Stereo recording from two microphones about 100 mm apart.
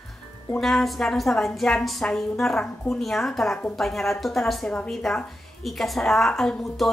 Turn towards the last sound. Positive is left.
turn(degrees=5)  # may be behind; listen again after turning